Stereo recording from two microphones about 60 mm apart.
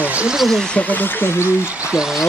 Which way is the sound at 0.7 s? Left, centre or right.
Left.